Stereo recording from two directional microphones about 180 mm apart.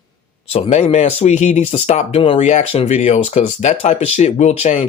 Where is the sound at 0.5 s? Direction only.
35° left (ahead or behind).